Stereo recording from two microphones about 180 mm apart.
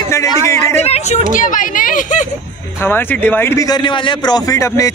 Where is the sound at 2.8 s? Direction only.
10° left (ahead or behind).